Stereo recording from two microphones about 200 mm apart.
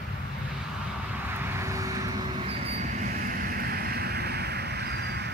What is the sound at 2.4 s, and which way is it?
Vehicle, 30° right (ahead or behind).